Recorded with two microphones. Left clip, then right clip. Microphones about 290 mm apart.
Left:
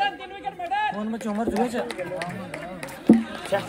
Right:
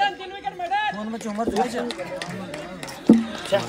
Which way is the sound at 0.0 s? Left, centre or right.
Right.